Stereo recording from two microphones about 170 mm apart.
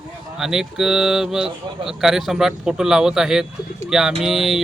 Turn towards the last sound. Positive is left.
turn(degrees=0)  # may be behind; listen again after turning